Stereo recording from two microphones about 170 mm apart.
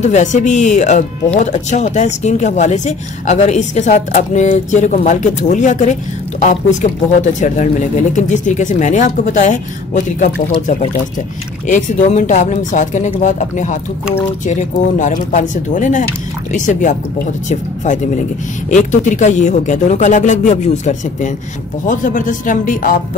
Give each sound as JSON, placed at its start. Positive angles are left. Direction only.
{"t": 0.0, "sound": "speech", "side_deg": 45}